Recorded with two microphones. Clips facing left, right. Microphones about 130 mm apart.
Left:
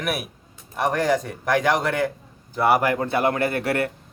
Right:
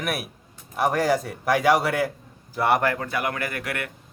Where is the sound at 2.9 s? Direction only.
30° left (ahead or behind).